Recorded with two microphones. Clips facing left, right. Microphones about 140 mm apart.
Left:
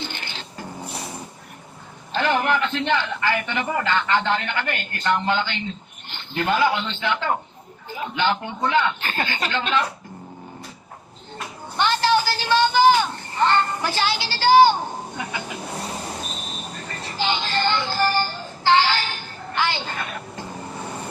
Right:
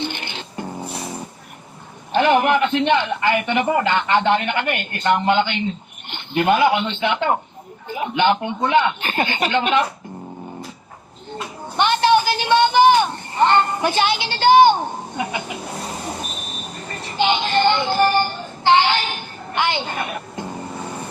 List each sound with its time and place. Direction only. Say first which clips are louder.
0.0 s filing: right 6 dB; 20° right (ahead or behind)
2.1 s a man's voice: right 5 dB; 20° right (ahead or behind)
11.8 s a sound: right 4 dB; 20° right (ahead or behind)
16.2 s vehicle: right 1 dB; 15° right (ahead or behind)
17.2 s music: right 6 dB; 20° right (ahead or behind)